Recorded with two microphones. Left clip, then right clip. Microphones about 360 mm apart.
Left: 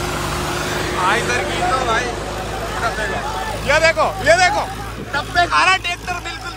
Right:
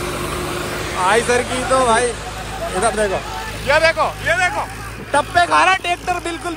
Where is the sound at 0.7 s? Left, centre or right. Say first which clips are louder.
Left 2 dB; left.